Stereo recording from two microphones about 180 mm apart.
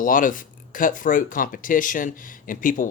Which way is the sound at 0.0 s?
50° left (ahead or behind).